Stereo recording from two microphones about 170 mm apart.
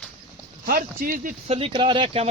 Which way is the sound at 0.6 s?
60° right (ahead or behind).